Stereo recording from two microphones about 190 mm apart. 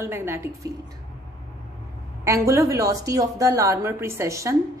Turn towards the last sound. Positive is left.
turn(degrees=-15)  # may be behind; listen again after turning